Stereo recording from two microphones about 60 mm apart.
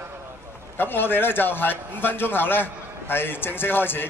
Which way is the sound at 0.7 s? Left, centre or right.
Left.